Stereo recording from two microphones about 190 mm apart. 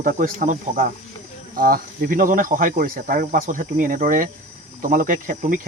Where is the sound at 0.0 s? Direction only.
45° right (ahead or behind).